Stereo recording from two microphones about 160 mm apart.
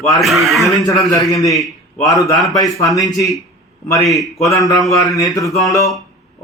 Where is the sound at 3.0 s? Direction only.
20° left (ahead or behind).